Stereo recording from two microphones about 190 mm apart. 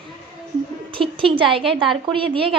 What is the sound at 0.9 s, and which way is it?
A woman's voice, 25° right (ahead or behind).